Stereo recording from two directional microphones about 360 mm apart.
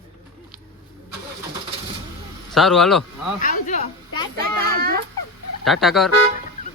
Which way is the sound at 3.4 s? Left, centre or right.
Centre.